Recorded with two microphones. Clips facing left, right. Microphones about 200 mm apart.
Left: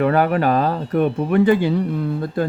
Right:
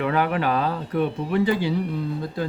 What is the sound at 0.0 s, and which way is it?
Speech, 45° left (ahead or behind).